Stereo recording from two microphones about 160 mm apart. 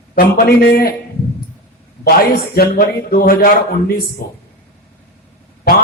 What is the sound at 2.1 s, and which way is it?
A man's voice, 75° left (ahead or behind).